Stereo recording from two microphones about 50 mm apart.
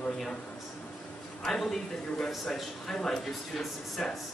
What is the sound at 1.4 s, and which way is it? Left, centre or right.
A man's voice, centre.